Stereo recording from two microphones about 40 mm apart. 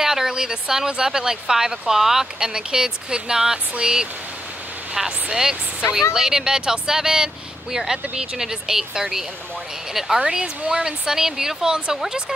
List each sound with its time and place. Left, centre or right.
0.0 s speech: centre
8.1 s speech: right
8.4 s speech: centre
10.2 s speech: right